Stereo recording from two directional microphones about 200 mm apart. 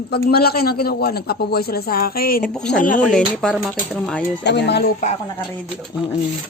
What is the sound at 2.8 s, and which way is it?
Speech, 40° left (ahead or behind).